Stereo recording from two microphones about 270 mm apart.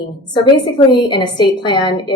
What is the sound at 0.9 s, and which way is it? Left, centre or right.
A woman's voice, centre.